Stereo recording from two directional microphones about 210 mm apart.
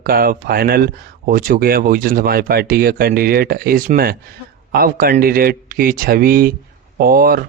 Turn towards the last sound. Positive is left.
turn(degrees=-45)  # may be behind; listen again after turning